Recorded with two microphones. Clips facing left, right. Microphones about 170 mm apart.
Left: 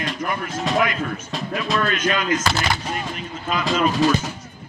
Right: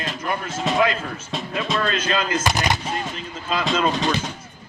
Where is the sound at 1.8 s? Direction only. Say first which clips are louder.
Left 1 dB; 30° right (ahead or behind).